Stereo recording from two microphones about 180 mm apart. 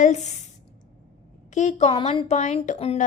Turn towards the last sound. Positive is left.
turn(degrees=40)  # may be behind; listen again after turning